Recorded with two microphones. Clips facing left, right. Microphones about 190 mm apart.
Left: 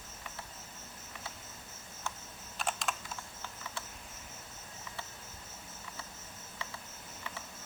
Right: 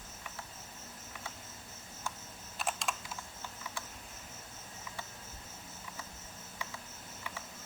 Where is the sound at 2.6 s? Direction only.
Centre (ahead or behind).